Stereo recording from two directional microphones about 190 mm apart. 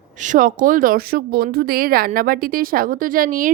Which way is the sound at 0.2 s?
45° right (ahead or behind).